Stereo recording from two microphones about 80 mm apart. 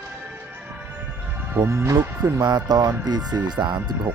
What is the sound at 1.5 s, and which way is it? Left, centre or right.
Speech, right.